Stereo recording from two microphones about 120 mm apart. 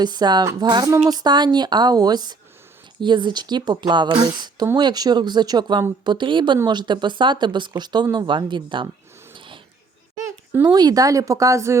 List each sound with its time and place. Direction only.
0.0 s a woman's voice: 35° right (ahead or behind)
9.3 s a sound: 45° right (ahead or behind)
10.6 s speech: 35° right (ahead or behind)